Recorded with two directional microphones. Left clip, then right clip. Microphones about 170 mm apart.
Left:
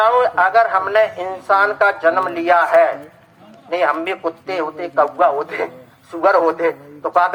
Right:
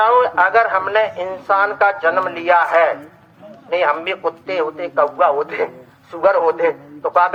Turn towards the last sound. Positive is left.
turn(degrees=40)  # may be behind; listen again after turning